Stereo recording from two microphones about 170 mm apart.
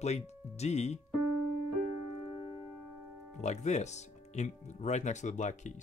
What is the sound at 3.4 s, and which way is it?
Speech, 40° left (ahead or behind).